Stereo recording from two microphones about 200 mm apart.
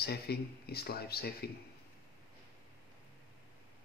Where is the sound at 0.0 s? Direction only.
50° left (ahead or behind).